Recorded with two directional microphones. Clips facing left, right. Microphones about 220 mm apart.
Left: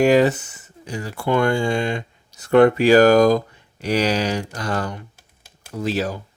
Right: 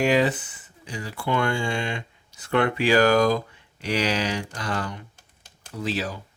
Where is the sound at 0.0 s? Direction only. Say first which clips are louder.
Left 6 dB; 45° left (ahead or behind).